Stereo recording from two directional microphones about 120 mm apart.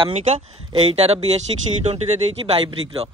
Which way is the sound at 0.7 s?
50° right (ahead or behind).